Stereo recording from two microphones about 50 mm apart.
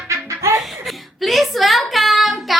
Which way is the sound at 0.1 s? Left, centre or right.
Right.